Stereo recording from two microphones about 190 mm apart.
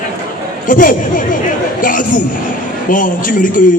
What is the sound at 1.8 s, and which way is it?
A man's voice, 45° left (ahead or behind).